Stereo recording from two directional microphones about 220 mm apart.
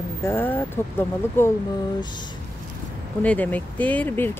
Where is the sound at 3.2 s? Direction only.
5° left (ahead or behind).